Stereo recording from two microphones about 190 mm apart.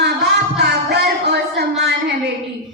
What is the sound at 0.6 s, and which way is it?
Music, 60° right (ahead or behind).